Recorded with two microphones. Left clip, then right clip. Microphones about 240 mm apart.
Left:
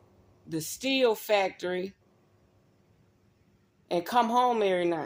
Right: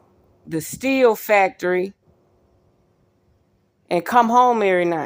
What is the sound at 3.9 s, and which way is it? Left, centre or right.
Speech, right.